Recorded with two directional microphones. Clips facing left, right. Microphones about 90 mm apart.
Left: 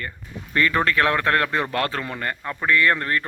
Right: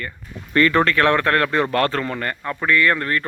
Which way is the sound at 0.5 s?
10° left (ahead or behind).